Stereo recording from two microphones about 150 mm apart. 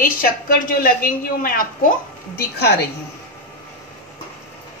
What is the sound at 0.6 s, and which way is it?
A woman's voice, 75° left (ahead or behind).